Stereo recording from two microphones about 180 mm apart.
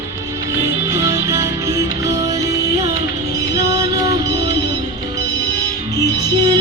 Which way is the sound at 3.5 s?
20° right (ahead or behind).